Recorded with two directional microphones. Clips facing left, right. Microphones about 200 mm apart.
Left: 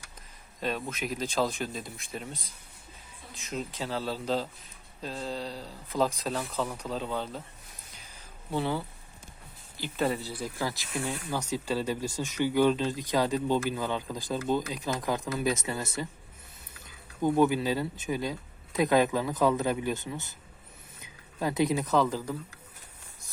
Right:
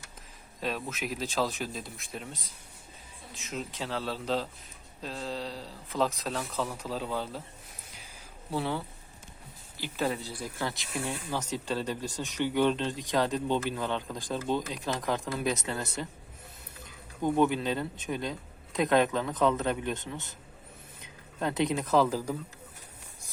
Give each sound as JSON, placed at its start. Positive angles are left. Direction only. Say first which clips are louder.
{"t": 0.6, "sound": "speech", "louder": "left 1 dB", "side_deg": 0}
{"t": 8.4, "sound": "speech", "louder": "left 2 dB", "side_deg": 0}
{"t": 10.0, "sound": "speech", "louder": "left 2 dB", "side_deg": 5}
{"t": 17.2, "sound": "speech", "louder": "left 2 dB", "side_deg": 5}
{"t": 21.3, "sound": "speech", "louder": "left 2 dB", "side_deg": 5}